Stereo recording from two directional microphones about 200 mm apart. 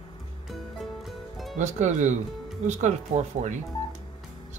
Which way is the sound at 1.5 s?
40° right (ahead or behind).